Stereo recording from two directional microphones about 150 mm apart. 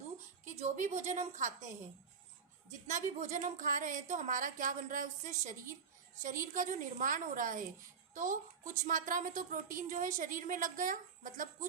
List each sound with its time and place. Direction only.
0.4 s a woman's voice: 55° right (ahead or behind)